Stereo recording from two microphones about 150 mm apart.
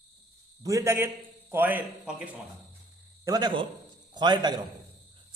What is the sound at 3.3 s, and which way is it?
A man's voice, 30° right (ahead or behind).